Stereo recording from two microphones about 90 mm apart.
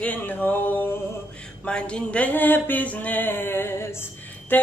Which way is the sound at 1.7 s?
10° left (ahead or behind).